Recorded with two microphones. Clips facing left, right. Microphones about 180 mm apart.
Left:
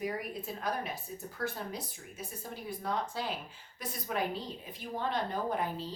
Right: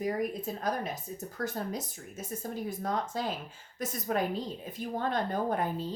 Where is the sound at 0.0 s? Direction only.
40° right (ahead or behind).